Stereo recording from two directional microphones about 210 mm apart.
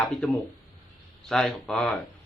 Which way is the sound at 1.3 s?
5° left (ahead or behind).